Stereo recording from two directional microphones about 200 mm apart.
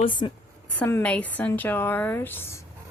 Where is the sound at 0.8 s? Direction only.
10° left (ahead or behind).